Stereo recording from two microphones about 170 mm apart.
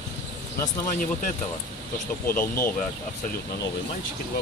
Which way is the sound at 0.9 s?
50° left (ahead or behind).